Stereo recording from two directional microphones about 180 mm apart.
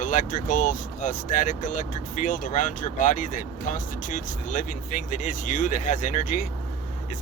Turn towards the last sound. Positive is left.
turn(degrees=45)  # may be behind; listen again after turning